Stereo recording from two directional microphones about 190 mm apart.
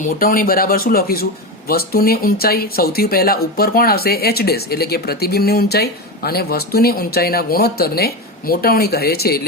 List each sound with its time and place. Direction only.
0.0 s speech: 50° left (ahead or behind)